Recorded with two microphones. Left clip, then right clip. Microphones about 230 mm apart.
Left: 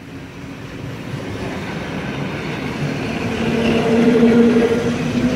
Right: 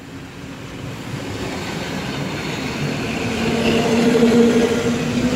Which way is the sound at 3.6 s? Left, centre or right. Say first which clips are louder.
Left 2 dB; right.